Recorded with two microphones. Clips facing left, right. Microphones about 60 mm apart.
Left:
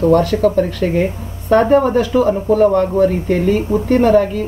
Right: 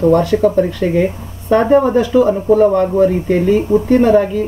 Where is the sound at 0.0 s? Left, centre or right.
Centre.